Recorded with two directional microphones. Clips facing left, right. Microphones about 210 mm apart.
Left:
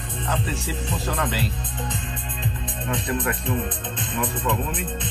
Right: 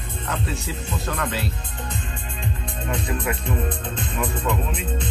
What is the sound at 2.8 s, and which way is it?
Speech, centre (ahead or behind).